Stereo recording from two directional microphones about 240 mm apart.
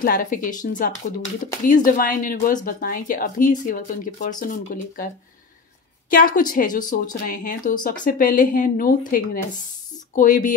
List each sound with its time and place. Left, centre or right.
0.0 s speech: left
6.0 s speech: left